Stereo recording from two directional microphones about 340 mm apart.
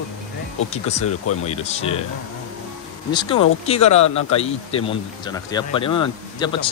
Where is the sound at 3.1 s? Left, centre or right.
Centre.